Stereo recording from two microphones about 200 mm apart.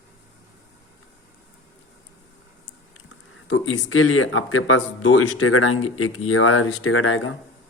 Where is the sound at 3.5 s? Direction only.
80° left.